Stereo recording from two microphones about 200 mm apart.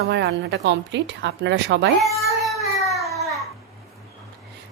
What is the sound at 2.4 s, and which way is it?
Baby cry, centre (ahead or behind).